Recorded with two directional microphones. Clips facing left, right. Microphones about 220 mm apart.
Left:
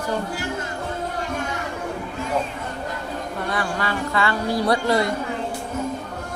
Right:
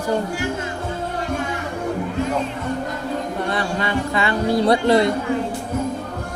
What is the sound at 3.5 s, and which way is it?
Speech, 20° right (ahead or behind).